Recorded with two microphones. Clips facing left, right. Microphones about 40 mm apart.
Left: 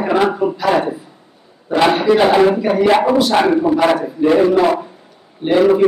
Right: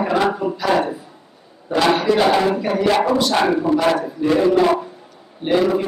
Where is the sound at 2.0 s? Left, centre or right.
Centre.